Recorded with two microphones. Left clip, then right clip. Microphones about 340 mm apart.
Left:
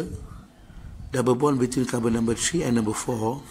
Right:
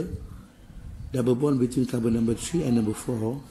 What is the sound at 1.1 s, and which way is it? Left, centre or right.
Speech, left.